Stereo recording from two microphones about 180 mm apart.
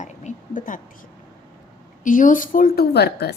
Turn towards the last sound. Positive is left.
turn(degrees=60)  # may be behind; listen again after turning